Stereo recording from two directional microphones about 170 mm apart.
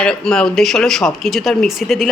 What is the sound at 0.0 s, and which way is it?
Speech, 5° left (ahead or behind).